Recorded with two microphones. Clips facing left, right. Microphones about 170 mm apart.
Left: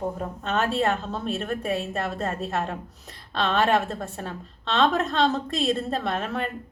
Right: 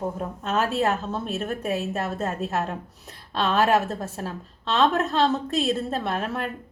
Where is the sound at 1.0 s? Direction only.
Centre (ahead or behind).